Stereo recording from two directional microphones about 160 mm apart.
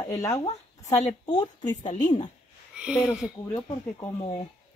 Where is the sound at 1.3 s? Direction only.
25° left (ahead or behind).